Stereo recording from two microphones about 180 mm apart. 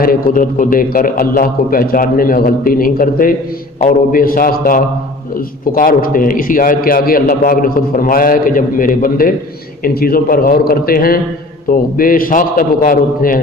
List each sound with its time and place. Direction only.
0.0 s a man's voice: 55° left (ahead or behind)